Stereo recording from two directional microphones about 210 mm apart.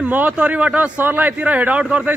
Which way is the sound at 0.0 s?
5° right (ahead or behind).